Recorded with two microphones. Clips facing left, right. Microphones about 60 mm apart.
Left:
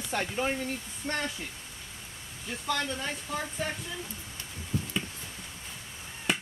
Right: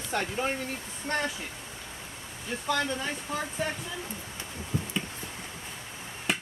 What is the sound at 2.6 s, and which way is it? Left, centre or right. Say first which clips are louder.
Speech: right 2 dB; centre.